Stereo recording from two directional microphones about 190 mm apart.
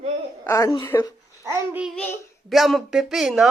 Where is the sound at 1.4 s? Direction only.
15° right (ahead or behind).